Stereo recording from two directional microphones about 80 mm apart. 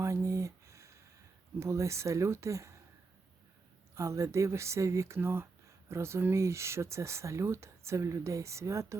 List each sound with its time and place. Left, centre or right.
0.0 s a sound: right
1.5 s speech: right
3.9 s speech: right